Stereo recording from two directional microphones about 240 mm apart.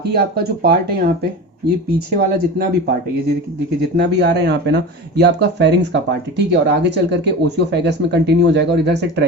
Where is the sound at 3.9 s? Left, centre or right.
Right.